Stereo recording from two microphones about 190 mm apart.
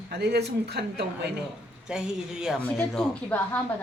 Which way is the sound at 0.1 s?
60° right (ahead or behind).